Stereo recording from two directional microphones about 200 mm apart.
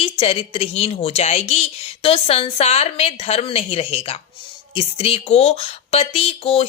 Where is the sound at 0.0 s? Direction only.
30° left (ahead or behind).